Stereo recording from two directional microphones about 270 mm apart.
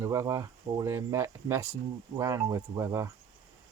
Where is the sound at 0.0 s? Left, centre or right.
Centre.